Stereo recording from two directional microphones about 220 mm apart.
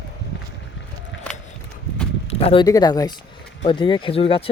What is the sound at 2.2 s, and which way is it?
Speech, 25° left (ahead or behind).